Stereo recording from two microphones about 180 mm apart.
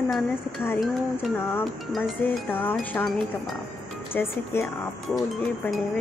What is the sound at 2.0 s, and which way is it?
Speech, 10° left (ahead or behind).